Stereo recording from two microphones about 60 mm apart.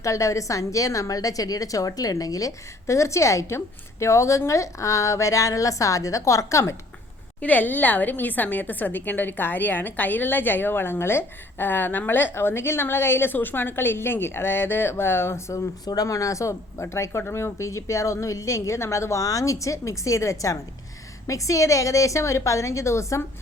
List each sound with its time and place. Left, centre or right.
0.0 s a woman's voice: left
2.8 s a woman's voice: left
7.4 s a woman's voice: left
15.5 s a woman's voice: left